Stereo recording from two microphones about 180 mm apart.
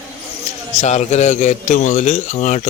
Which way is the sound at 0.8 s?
40° left (ahead or behind).